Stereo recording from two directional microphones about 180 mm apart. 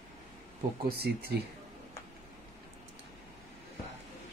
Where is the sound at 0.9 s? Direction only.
60° right (ahead or behind).